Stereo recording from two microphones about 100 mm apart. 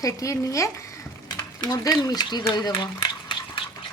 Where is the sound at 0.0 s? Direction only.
35° left (ahead or behind); by 3.6 s 50° left (ahead or behind).